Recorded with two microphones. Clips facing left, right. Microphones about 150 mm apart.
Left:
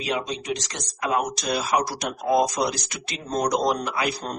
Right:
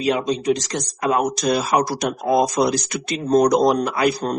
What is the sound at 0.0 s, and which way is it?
Speech, 40° right (ahead or behind).